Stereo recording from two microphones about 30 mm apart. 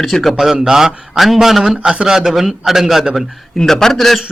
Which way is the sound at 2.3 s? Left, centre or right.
Centre.